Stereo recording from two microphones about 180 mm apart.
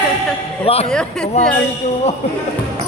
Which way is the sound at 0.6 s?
35° left (ahead or behind).